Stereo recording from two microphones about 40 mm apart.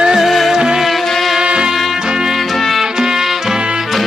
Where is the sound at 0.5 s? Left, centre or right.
Centre.